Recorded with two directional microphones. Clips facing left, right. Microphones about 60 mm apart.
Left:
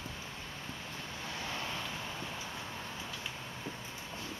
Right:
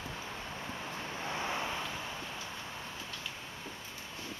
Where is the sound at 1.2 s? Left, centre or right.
Right.